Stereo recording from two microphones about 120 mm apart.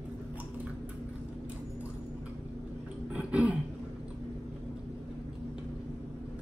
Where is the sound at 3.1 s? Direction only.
10° right (ahead or behind).